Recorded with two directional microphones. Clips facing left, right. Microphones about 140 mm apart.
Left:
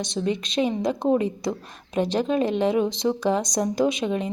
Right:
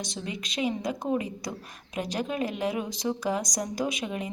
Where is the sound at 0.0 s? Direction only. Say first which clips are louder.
Left 10 dB; 25° left (ahead or behind).